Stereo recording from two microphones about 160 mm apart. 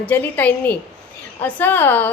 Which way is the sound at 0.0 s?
10° left (ahead or behind).